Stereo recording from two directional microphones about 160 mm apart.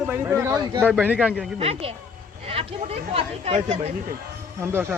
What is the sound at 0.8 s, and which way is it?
Speech, 10° right (ahead or behind).